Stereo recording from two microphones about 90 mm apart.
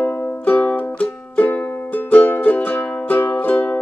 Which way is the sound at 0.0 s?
20° left (ahead or behind).